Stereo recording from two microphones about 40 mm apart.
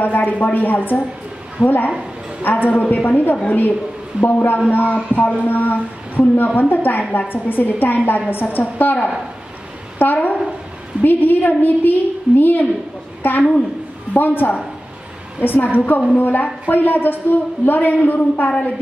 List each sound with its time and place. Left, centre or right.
0.0 s a woman's voice: left
7.0 s a woman's voice: left
7.4 s a woman's voice: left
15.7 s a woman's voice: left